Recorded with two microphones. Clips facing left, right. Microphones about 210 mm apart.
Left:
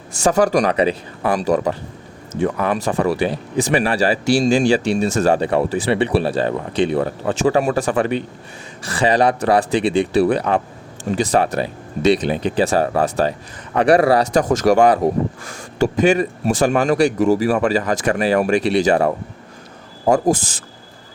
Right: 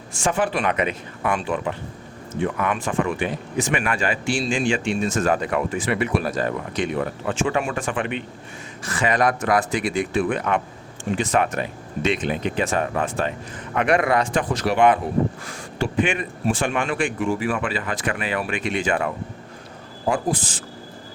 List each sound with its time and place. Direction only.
0.2 s speech: 40° left (ahead or behind)